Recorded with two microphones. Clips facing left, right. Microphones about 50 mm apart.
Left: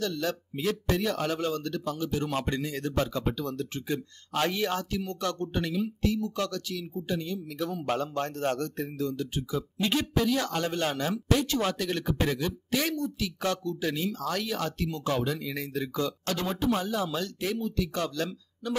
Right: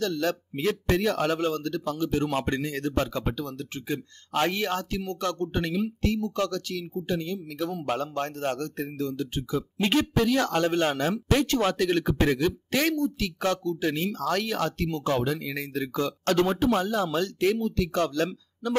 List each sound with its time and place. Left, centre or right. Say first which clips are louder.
0.0 s speech: right 4 dB; right
2.0 s speech: right 5 dB; right
3.9 s a man's voice: right 4 dB; right
4.5 s speech: right 1 dB; right
7.7 s a man's voice: even; centre
8.0 s a man's voice: right 1 dB; right
11.3 s speech: right 4 dB; right